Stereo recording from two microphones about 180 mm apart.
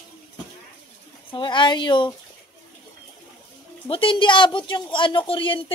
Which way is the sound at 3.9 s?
30° left (ahead or behind).